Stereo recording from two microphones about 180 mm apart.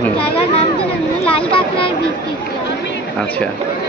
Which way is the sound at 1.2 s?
30° left (ahead or behind).